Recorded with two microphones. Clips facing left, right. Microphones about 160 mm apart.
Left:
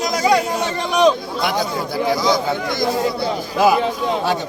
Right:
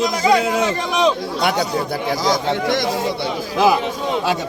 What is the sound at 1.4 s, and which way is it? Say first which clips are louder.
Speech: right 1 dB; 70° right (ahead or behind).